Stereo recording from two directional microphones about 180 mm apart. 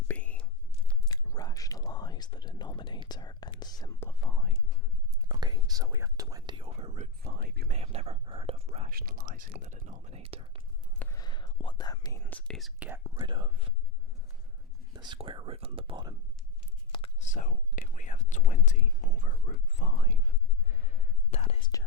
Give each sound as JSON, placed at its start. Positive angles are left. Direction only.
{"t": 0.1, "sound": "whispering", "side_deg": 10}
{"t": 1.0, "sound": "whispering", "side_deg": 20}
{"t": 4.2, "sound": "whispering", "side_deg": 5}
{"t": 5.3, "sound": "whispering", "side_deg": -25}
{"t": 7.2, "sound": "whispering", "side_deg": -55}
{"t": 7.7, "sound": "whispering", "side_deg": -35}
{"t": 8.9, "sound": "whispering", "side_deg": -55}
{"t": 11.0, "sound": "whispering", "side_deg": 20}
{"t": 12.2, "sound": "speech", "side_deg": 5}
{"t": 12.9, "sound": "speech", "side_deg": -20}
{"t": 14.9, "sound": "speech", "side_deg": -25}
{"t": 17.2, "sound": "whispering", "side_deg": 45}